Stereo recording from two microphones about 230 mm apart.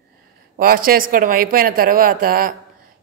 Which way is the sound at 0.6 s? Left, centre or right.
Right.